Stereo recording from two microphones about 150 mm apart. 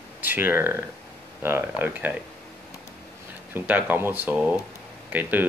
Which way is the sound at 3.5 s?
10° right (ahead or behind).